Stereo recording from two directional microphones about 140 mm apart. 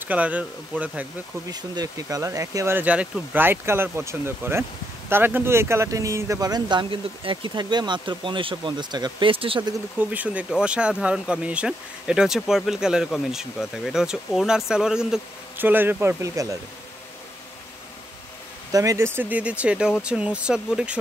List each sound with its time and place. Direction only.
0.0 s speech: 10° right (ahead or behind)
1.5 s speech: 25° right (ahead or behind)
9.9 s speech: 10° right (ahead or behind)
18.7 s speech: 25° right (ahead or behind); by 21.0 s 5° right (ahead or behind)